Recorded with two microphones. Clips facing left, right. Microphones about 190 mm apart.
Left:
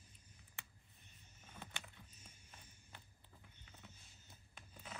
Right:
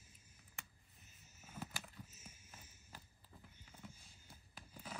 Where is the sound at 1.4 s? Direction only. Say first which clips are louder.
Right 4 dB; 5° right (ahead or behind).